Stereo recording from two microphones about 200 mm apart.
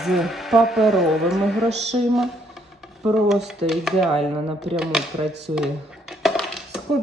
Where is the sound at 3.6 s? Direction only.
Centre (ahead or behind).